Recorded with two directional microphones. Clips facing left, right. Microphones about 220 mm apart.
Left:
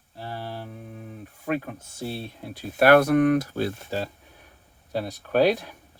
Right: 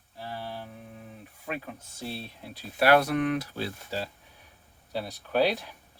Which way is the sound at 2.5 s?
45° left (ahead or behind).